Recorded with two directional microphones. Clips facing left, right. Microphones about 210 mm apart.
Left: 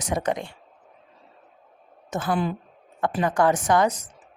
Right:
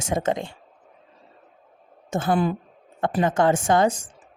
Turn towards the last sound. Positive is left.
turn(degrees=-30)  # may be behind; listen again after turning